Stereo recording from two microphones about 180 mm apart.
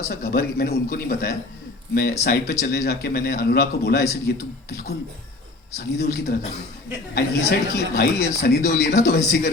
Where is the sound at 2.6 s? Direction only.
65° left (ahead or behind).